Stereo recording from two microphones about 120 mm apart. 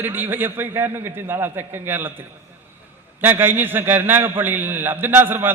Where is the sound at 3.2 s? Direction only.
15° right (ahead or behind).